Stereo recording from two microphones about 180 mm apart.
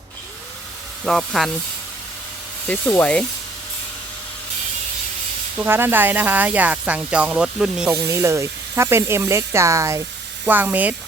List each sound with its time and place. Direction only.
1.0 s speech: centre (ahead or behind)
2.6 s speech: 10° left (ahead or behind)
5.5 s speech: 10° right (ahead or behind)
8.0 s speech: 15° right (ahead or behind)